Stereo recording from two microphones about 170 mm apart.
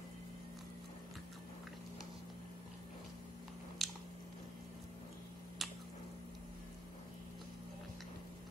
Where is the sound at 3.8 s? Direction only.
Centre (ahead or behind).